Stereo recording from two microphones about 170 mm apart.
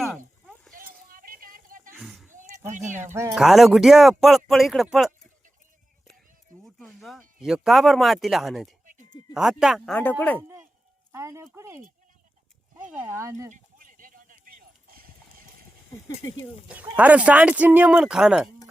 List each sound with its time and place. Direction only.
0.7 s a sound: 55° right (ahead or behind)
2.0 s a sound: centre (ahead or behind)
2.3 s a sound: 50° right (ahead or behind)
2.6 s speech: 45° right (ahead or behind)
3.0 s speech: 15° right (ahead or behind)
3.4 s speech: centre (ahead or behind)
6.7 s speech: 5° left (ahead or behind)
11.1 s music: 15° right (ahead or behind)
11.5 s speech: 15° right (ahead or behind)
13.0 s speech: 15° right (ahead or behind)
13.5 s clip-clop: 50° right (ahead or behind)
17.0 s speech: 10° right (ahead or behind)